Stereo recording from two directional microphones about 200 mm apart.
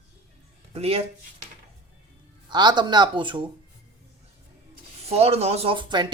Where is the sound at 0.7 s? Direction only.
30° right (ahead or behind).